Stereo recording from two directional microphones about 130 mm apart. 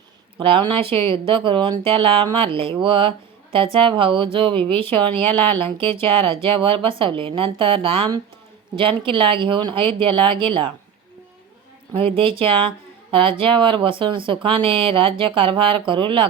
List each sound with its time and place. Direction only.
0.3 s speech: 40° right (ahead or behind)
11.9 s speech: 45° right (ahead or behind)